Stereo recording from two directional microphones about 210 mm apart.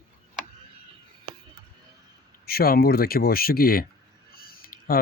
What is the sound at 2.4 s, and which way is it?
Speech, 45° left (ahead or behind).